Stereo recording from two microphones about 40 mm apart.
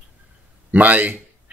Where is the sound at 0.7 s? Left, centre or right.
Right.